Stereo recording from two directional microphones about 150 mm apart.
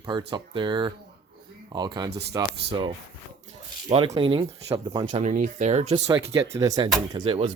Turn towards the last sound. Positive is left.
turn(degrees=-35)  # may be behind; listen again after turning